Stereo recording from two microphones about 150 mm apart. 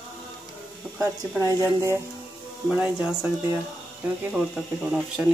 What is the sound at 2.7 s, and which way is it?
Speech, 10° right (ahead or behind).